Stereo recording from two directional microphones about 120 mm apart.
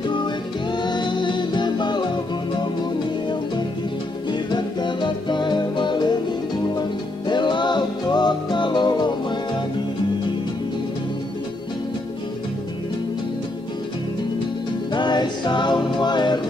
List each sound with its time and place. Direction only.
0.1 s music: 40° left (ahead or behind)
4.3 s music: 35° left (ahead or behind)
14.9 s music: 40° left (ahead or behind)